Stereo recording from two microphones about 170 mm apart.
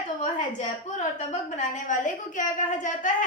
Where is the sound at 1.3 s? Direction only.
45° left (ahead or behind).